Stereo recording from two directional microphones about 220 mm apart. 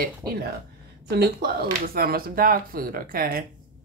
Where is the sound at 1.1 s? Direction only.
45° right (ahead or behind).